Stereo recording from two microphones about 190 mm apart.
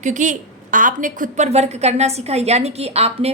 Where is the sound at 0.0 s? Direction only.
40° right (ahead or behind).